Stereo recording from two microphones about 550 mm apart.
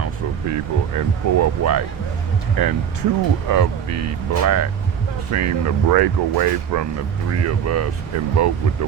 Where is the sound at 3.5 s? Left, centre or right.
Right.